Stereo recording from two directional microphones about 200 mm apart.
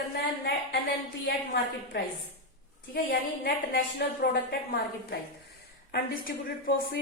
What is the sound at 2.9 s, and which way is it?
A woman's voice, 50° left (ahead or behind).